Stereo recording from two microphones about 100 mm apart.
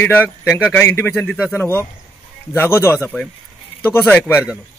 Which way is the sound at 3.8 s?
15° left (ahead or behind).